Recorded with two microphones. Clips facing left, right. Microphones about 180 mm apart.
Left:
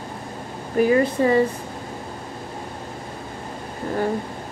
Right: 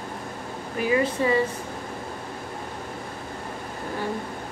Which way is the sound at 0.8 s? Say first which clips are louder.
Left 6 dB; 45° left (ahead or behind).